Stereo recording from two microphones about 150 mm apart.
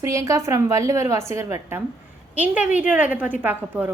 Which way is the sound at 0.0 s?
20° right (ahead or behind).